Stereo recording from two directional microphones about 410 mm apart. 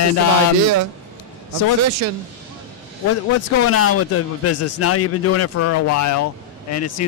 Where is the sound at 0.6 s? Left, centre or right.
Right.